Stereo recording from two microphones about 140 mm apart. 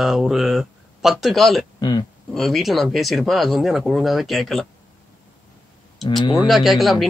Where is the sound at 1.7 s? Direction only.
30° left (ahead or behind).